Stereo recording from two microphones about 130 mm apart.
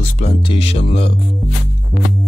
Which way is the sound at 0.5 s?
45° left (ahead or behind).